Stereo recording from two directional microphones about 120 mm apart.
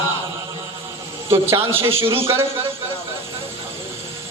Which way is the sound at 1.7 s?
20° right (ahead or behind).